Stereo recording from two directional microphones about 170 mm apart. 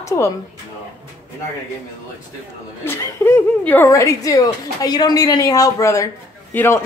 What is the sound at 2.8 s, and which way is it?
A woman's voice, 15° left (ahead or behind).